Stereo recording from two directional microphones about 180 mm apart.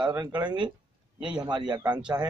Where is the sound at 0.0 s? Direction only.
20° right (ahead or behind).